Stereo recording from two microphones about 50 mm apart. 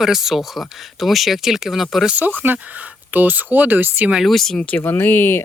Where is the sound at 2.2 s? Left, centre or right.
Right.